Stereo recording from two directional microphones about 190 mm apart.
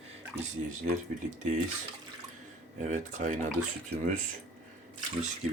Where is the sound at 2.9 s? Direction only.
40° right (ahead or behind).